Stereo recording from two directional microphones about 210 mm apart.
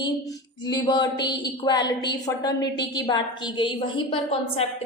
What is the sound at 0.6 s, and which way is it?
A woman's voice, 20° left (ahead or behind).